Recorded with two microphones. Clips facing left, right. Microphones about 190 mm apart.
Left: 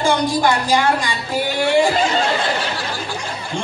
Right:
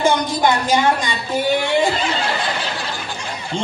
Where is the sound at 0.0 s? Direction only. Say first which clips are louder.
Even; 20° right (ahead or behind).